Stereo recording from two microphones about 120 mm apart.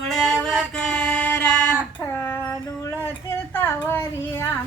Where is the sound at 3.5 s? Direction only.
20° left (ahead or behind).